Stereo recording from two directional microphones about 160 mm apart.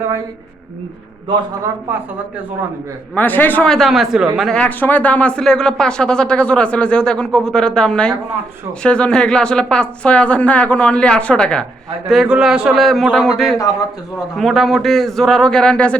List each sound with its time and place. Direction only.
3.2 s speech: 10° left (ahead or behind)
4.6 s a woman's voice: 10° left (ahead or behind)